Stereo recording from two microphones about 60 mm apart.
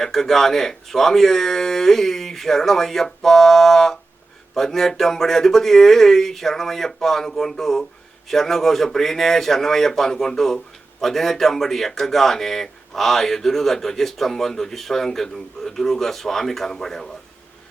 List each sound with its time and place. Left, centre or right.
0.0 s speech: centre